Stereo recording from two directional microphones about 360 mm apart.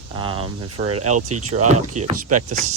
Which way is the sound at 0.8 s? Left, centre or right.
Right.